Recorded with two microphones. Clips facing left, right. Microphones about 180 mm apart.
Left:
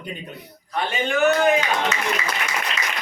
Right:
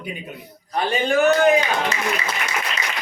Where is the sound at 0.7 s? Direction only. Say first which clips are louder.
Right 3 dB; 35° right (ahead or behind).